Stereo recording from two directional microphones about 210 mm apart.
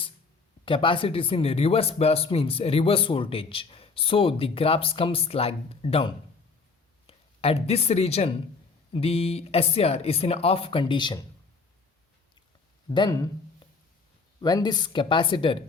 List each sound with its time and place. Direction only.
0.6 s speech: 25° left (ahead or behind)
12.9 s speech: 20° left (ahead or behind)